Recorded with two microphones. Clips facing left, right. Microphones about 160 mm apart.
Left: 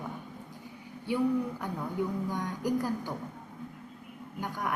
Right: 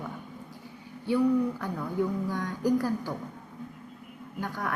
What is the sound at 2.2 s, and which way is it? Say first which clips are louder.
Speech: right 4 dB; 20° left (ahead or behind).